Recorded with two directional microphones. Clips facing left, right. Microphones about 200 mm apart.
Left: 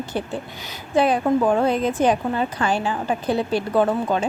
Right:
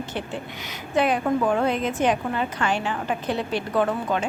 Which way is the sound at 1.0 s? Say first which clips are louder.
Left 3 dB; 30° left (ahead or behind).